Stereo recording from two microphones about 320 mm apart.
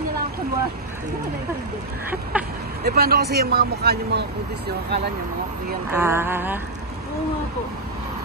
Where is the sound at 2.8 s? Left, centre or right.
Right.